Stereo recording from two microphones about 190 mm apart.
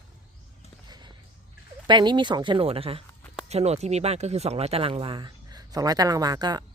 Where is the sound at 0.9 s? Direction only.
25° right (ahead or behind).